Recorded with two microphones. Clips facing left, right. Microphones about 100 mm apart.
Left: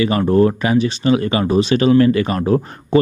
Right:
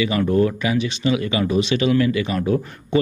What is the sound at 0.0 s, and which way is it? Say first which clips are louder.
Speech: left 4 dB; 40° left (ahead or behind).